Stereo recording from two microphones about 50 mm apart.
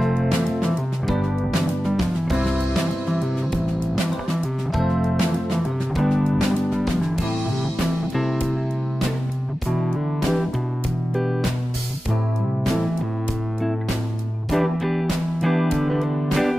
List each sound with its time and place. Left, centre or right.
1.0 s music: centre
4.7 s music: centre
14.5 s music: centre